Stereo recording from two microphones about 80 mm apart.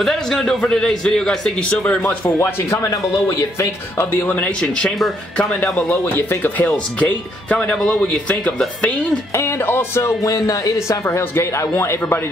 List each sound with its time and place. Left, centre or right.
0.0 s a man's voice: centre
2.3 s a man's voice: left
2.9 s speech: left
3.9 s a man's voice: left
4.3 s a man's voice: centre
4.9 s speech: centre
5.5 s a man's voice: centre
7.4 s a man's voice: centre
9.3 s speech: left
10.2 s speech: left